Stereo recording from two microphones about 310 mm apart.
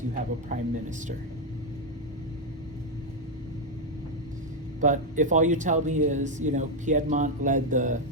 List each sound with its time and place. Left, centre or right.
0.1 s speech: right
4.8 s speech: right